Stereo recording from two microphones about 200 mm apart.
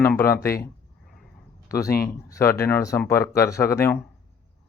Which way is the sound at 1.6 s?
15° left (ahead or behind).